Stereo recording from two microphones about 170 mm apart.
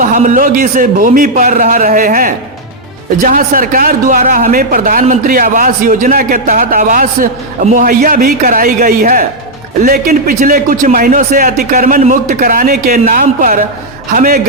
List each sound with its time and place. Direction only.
0.0 s a man's voice: 50° right (ahead or behind)